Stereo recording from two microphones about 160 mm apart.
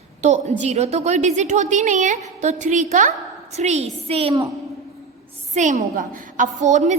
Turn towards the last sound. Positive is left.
turn(degrees=-45)  # may be behind; listen again after turning